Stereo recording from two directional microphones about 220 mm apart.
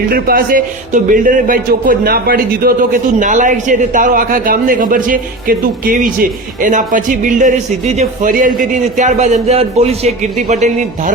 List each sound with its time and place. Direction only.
0.1 s a man's voice: 40° right (ahead or behind)